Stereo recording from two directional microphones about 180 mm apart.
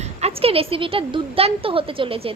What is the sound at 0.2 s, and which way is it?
A woman's voice, 35° right (ahead or behind).